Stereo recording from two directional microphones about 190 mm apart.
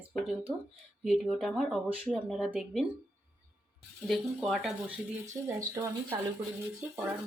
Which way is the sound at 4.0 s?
Centre (ahead or behind).